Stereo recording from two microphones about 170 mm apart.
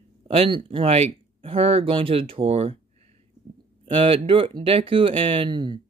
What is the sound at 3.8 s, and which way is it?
Speech, 30° right (ahead or behind).